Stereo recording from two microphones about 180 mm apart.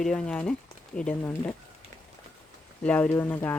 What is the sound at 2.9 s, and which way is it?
Speech, 10° left (ahead or behind).